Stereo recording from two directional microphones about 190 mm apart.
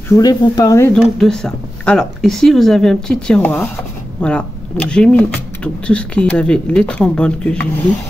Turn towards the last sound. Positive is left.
turn(degrees=5)  # may be behind; listen again after turning